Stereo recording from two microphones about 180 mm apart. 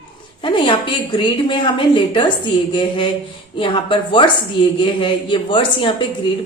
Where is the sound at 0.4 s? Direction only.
25° left (ahead or behind).